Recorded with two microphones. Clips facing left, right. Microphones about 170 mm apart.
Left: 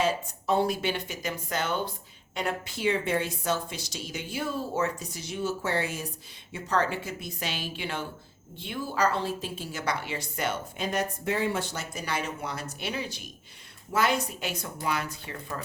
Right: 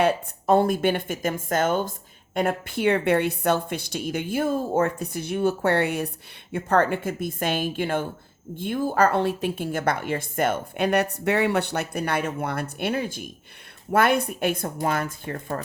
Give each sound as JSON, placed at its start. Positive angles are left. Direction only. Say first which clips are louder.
{"t": 0.0, "sound": "a woman's voice", "louder": "right 6 dB", "side_deg": -55}